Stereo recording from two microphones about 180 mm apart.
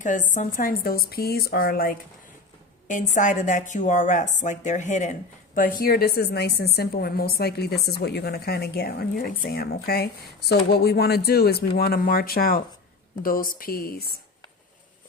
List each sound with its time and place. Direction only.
0.0 s a woman's voice: 45° left (ahead or behind)